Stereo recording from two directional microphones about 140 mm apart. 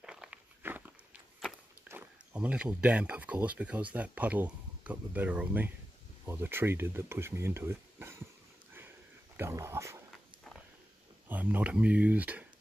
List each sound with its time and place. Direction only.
0.0 s walk: 5° right (ahead or behind)
1.9 s speech: 10° right (ahead or behind)
9.4 s a sound: 20° right (ahead or behind)
11.2 s speech: 15° right (ahead or behind)